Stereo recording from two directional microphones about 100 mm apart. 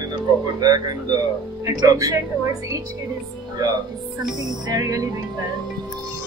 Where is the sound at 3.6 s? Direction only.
40° right (ahead or behind).